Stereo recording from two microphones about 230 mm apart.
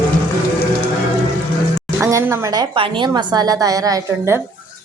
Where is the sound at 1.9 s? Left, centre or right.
Centre.